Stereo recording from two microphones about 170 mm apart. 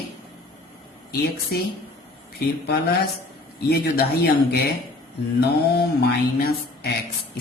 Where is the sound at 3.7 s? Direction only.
70° left (ahead or behind).